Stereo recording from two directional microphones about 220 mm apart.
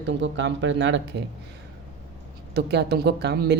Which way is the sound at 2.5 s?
50° right (ahead or behind).